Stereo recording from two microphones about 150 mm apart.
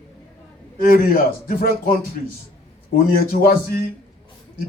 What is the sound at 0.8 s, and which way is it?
Speech, 70° left (ahead or behind).